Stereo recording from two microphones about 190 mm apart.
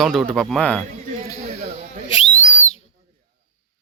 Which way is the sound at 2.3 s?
90° left.